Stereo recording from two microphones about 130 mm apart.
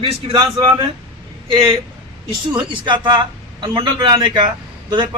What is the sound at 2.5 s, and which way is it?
A man's voice, 35° right (ahead or behind).